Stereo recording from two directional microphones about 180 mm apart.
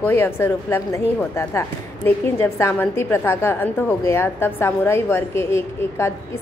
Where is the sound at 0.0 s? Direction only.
10° left (ahead or behind).